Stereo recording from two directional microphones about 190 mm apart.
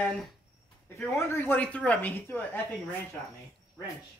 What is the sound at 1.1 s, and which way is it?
Speech, 10° left (ahead or behind).